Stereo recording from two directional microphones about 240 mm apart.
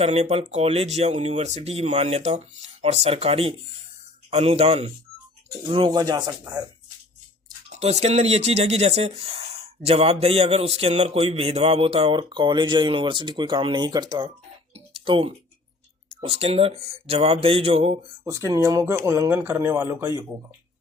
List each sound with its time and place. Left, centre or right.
0.0 s speech: right
7.7 s speech: right
18.3 s speech: centre